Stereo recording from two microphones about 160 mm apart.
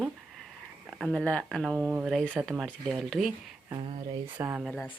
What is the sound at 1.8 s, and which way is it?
Speech, 10° right (ahead or behind).